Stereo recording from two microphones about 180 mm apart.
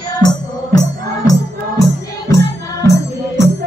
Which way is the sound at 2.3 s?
15° left (ahead or behind).